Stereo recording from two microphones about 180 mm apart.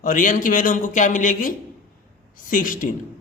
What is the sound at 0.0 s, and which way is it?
A man's voice, 45° left (ahead or behind).